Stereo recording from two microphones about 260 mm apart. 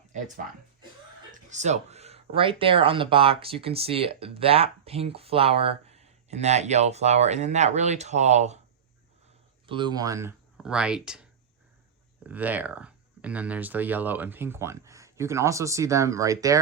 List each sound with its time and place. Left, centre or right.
1.3 s speech: right
9.6 s speech: centre